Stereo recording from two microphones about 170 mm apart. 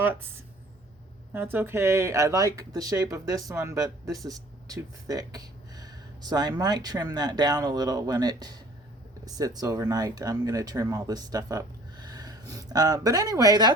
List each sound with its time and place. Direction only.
0.0 s speech: 10° right (ahead or behind)
1.3 s speech: 10° right (ahead or behind)